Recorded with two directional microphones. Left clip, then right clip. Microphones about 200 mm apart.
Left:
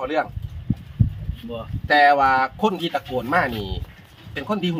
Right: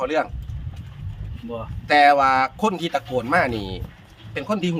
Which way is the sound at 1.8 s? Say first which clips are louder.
Even; 50° right (ahead or behind).